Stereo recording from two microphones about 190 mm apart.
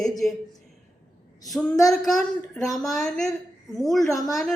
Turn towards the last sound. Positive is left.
turn(degrees=0)  # may be behind; listen again after turning